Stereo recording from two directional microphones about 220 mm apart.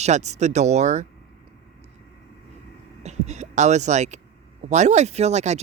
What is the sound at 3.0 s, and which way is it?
Speech, 30° right (ahead or behind).